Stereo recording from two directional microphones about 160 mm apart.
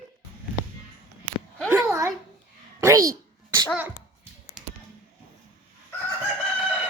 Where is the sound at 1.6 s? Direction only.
15° right (ahead or behind).